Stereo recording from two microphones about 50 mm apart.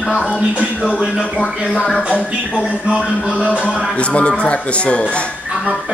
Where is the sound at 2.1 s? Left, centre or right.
Left.